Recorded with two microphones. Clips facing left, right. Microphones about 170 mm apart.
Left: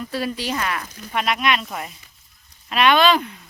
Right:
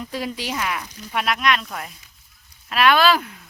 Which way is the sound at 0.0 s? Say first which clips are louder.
Left 2 dB; 15° right (ahead or behind).